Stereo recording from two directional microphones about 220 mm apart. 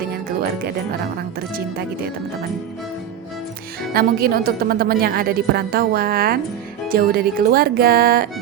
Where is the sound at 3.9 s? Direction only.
45° right (ahead or behind).